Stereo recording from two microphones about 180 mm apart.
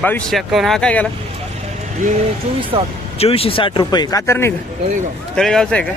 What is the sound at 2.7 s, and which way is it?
Speech, 25° right (ahead or behind).